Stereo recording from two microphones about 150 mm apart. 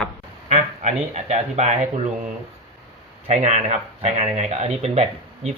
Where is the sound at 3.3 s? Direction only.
50° right (ahead or behind).